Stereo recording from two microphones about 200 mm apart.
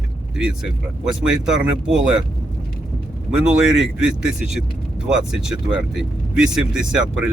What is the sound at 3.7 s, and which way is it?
Speech, centre (ahead or behind).